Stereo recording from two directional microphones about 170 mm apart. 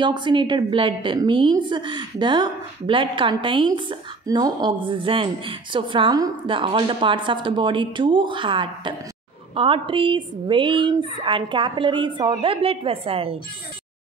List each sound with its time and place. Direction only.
0.0 s a woman's voice: 25° right (ahead or behind)